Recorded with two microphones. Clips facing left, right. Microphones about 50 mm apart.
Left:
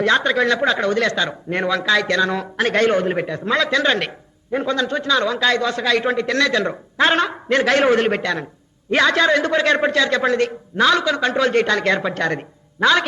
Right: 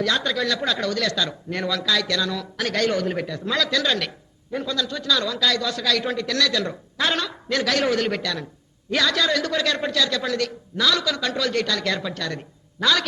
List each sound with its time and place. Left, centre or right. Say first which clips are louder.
0.0 s a man's voice: left 6 dB; left